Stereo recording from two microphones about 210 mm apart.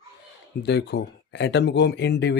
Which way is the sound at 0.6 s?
55° left (ahead or behind).